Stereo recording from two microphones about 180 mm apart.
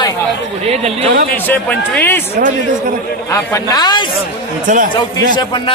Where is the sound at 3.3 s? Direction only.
15° left (ahead or behind).